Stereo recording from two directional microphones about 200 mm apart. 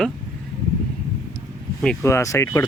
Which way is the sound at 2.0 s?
15° left (ahead or behind).